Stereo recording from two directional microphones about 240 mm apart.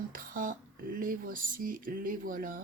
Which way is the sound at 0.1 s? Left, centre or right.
Right.